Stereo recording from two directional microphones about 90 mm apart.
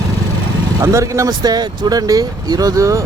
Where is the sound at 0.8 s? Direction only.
35° right (ahead or behind).